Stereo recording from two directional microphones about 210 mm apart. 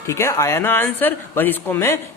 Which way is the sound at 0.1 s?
15° left (ahead or behind).